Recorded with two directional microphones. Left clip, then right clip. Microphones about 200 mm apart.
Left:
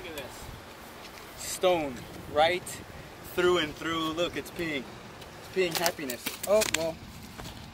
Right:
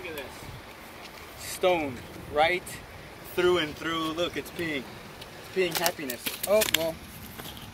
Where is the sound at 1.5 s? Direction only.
15° left (ahead or behind).